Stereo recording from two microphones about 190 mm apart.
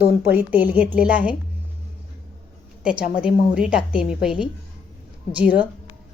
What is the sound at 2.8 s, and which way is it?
A woman's voice, 5° right (ahead or behind).